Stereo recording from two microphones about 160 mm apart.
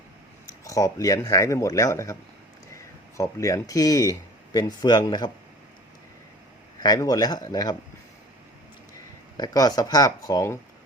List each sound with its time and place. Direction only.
0.6 s speech: 20° left (ahead or behind)
3.2 s speech: 20° left (ahead or behind)
6.8 s speech: 25° left (ahead or behind)
9.4 s speech: 25° left (ahead or behind)